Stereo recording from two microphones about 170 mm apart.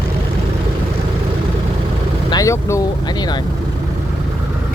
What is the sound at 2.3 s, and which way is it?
Vehicle, 20° left (ahead or behind).